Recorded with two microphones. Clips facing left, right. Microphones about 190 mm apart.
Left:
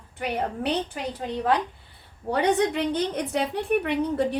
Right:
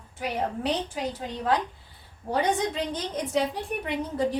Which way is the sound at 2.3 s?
65° left (ahead or behind).